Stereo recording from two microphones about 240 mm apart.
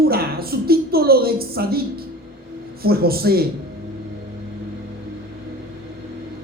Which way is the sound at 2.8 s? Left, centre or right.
Right.